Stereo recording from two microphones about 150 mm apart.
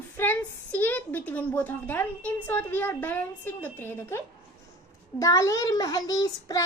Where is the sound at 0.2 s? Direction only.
10° left (ahead or behind).